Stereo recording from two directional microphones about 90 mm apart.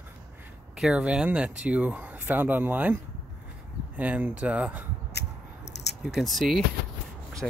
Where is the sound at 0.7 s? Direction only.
10° right (ahead or behind).